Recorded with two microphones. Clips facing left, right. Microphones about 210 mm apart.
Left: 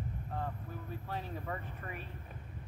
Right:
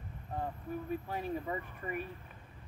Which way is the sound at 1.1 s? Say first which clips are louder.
Right 4 dB; 10° right (ahead or behind).